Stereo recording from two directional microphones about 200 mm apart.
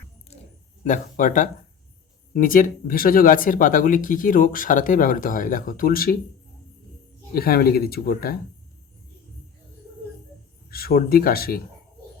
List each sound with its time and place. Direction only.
0.9 s speech: 40° left (ahead or behind)
7.3 s speech: 50° left (ahead or behind)
10.7 s speech: 50° left (ahead or behind)